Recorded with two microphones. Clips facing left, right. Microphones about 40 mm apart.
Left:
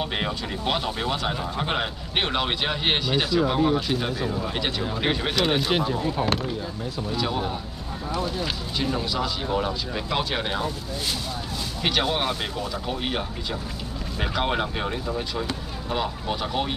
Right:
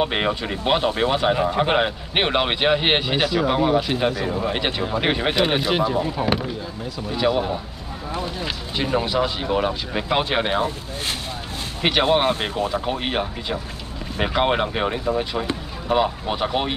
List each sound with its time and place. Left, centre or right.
0.0 s speech: right
5.7 s speech: centre
7.2 s speech: right
8.7 s speech: right
11.8 s speech: right
13.0 s speech: right